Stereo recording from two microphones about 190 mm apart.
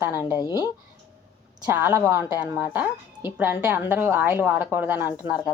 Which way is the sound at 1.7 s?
10° right (ahead or behind).